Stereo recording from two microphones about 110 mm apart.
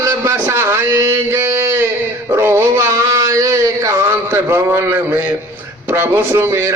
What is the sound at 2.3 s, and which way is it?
Dog, 25° right (ahead or behind).